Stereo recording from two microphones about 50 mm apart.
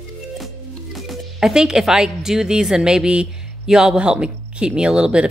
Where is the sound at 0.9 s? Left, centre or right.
Centre.